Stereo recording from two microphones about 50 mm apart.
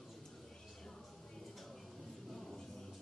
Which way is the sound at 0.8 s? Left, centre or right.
Centre.